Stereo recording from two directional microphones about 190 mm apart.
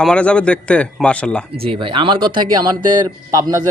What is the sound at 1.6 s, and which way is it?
Speech, 30° right (ahead or behind).